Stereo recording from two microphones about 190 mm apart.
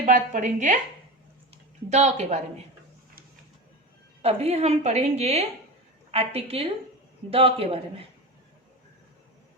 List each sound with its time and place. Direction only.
0.0 s a woman's voice: 40° right (ahead or behind)
1.9 s a woman's voice: 35° right (ahead or behind)
4.2 s a woman's voice: 35° right (ahead or behind)